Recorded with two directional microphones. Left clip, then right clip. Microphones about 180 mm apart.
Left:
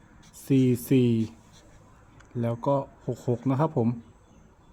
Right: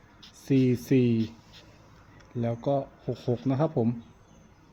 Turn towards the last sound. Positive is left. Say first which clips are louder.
# left 1 dB
turn(degrees=25)  # may be behind; listen again after turning